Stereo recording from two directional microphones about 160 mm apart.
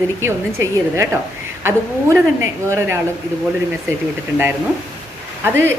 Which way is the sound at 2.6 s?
15° right (ahead or behind).